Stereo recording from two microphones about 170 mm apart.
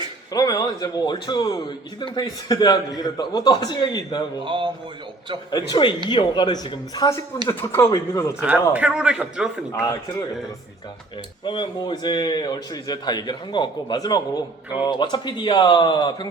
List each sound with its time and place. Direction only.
0.3 s a man's voice: 20° left (ahead or behind)
4.4 s a sound: 30° right (ahead or behind)
5.5 s a man's voice: 25° left (ahead or behind)
8.4 s a man's voice: 5° right (ahead or behind)
11.4 s a man's voice: 30° left (ahead or behind)